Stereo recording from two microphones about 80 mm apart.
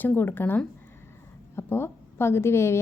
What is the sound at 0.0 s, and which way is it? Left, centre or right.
A woman's voice, left.